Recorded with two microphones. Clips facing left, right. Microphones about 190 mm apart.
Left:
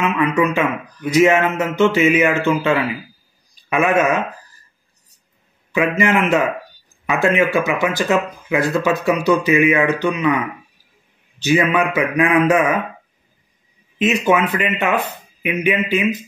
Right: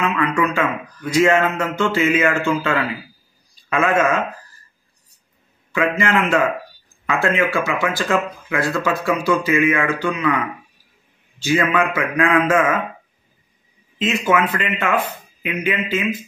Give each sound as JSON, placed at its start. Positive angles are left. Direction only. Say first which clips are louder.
{"t": 0.0, "sound": "speech", "louder": "left 2 dB", "side_deg": 15}
{"t": 5.7, "sound": "speech", "louder": "left 2 dB", "side_deg": 20}
{"t": 11.4, "sound": "speech", "louder": "left 2 dB", "side_deg": 15}
{"t": 14.0, "sound": "speech", "louder": "left 2 dB", "side_deg": 20}